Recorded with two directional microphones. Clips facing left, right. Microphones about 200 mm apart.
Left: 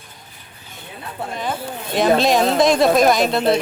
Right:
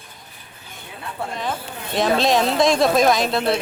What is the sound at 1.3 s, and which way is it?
Speech, centre (ahead or behind).